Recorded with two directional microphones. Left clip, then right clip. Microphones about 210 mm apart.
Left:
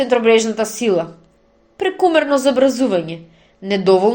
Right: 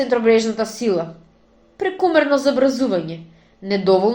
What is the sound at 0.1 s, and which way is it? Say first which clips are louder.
A woman's voice: left 2 dB; 35° left (ahead or behind).